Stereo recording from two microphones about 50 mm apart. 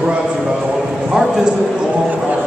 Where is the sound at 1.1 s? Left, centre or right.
Centre.